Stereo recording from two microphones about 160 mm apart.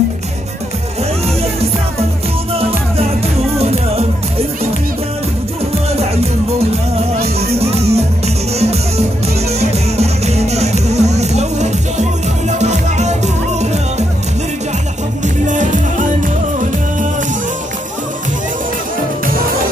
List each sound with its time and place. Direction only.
3.5 s music: 40° right (ahead or behind)
7.5 s music: 40° right (ahead or behind)
15.2 s music: 50° right (ahead or behind)